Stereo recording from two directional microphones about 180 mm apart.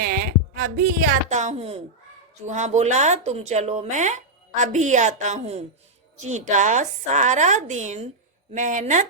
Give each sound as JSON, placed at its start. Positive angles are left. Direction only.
{"t": 0.0, "sound": "speech", "side_deg": -55}